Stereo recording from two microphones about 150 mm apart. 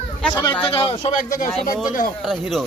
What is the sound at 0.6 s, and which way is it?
Speech, 35° left (ahead or behind).